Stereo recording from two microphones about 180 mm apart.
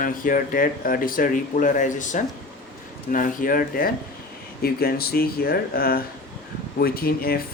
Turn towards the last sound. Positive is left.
turn(degrees=55)  # may be behind; listen again after turning